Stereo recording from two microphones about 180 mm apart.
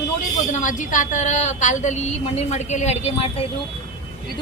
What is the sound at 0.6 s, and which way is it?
A woman's voice, 45° left (ahead or behind).